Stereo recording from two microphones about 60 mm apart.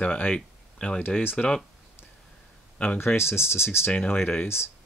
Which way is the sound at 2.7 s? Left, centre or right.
Left.